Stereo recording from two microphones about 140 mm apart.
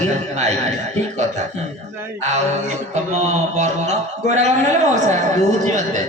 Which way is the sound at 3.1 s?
55° right (ahead or behind).